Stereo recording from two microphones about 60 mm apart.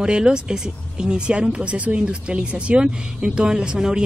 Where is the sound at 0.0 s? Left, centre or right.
Centre.